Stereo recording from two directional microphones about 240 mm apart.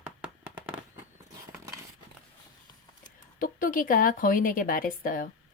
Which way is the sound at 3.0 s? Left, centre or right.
Left.